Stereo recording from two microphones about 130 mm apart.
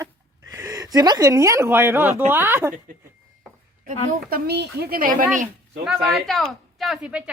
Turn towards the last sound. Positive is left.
turn(degrees=-5)  # may be behind; listen again after turning